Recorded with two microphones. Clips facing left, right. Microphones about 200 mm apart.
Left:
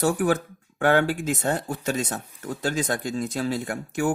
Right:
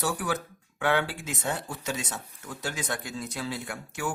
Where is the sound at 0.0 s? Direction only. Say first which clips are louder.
Left 8 dB; 50° left (ahead or behind).